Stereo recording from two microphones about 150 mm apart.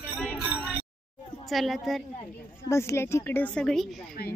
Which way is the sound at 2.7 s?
20° left (ahead or behind).